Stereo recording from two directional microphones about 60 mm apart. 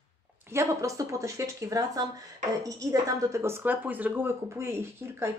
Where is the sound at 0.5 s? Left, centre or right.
Right.